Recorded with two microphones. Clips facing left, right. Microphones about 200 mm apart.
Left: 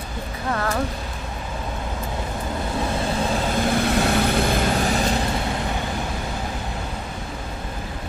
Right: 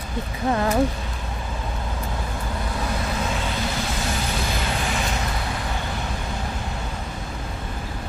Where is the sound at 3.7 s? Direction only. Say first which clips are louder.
Left 8 dB; 60° left (ahead or behind).